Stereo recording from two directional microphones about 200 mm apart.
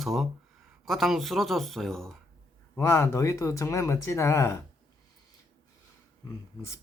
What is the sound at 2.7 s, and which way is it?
Speech, 10° left (ahead or behind).